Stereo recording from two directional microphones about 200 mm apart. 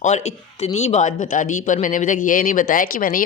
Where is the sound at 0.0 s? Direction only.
35° left (ahead or behind).